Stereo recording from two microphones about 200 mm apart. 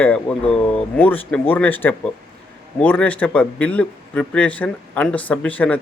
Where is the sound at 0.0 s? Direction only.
5° left (ahead or behind).